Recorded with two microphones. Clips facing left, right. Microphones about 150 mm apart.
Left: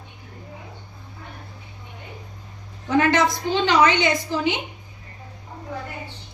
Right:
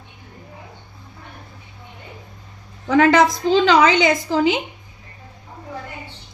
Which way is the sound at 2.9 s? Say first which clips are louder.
Right 5 dB; 90° right.